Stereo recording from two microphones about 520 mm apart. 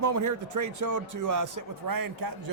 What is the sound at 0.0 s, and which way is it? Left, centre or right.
Speech, right.